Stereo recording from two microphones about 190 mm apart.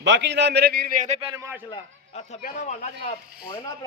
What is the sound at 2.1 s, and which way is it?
Speech, 40° left (ahead or behind).